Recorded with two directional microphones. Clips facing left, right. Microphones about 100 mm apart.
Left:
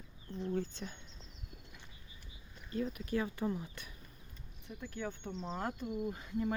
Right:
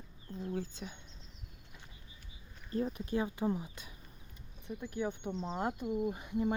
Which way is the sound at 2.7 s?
35° right (ahead or behind).